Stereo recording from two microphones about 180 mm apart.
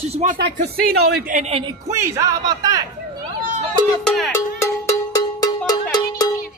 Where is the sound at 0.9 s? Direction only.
60° right (ahead or behind).